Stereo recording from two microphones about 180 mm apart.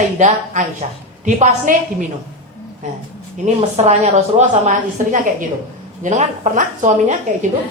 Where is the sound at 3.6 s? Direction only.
35° right (ahead or behind).